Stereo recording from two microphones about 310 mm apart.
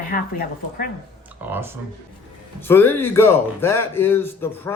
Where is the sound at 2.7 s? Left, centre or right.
Centre.